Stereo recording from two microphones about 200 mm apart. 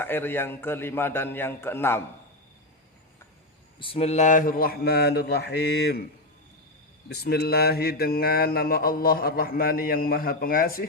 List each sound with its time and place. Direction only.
0.0 s a man's voice: 10° left (ahead or behind)
3.8 s mantra: 30° left (ahead or behind); by 6.1 s 55° left (ahead or behind)
7.1 s mantra: 55° left (ahead or behind)